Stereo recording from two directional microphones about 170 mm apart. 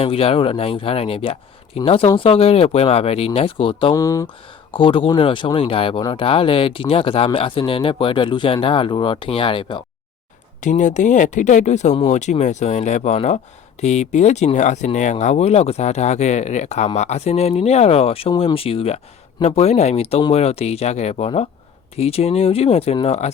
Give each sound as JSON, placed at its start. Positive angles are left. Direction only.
{"t": 0.0, "sound": "speech", "side_deg": 35}
{"t": 3.9, "sound": "speech", "side_deg": 20}
{"t": 4.7, "sound": "speech", "side_deg": 30}
{"t": 10.6, "sound": "speech", "side_deg": 45}